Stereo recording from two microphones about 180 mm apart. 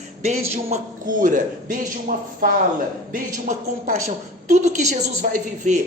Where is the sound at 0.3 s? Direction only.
35° right (ahead or behind).